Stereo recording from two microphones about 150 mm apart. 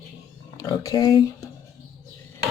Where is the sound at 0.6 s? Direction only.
25° left (ahead or behind).